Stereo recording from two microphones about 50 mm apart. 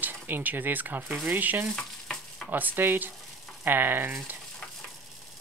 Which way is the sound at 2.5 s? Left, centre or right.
Right.